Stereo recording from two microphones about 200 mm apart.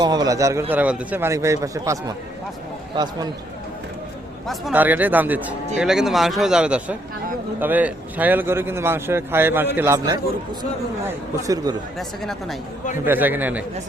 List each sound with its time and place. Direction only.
0.0 s a man's voice: 20° right (ahead or behind)
4.4 s a man's voice: 5° right (ahead or behind)
11.4 s a man's voice: 20° right (ahead or behind)
11.9 s speech: centre (ahead or behind)
13.1 s a man's voice: 10° right (ahead or behind)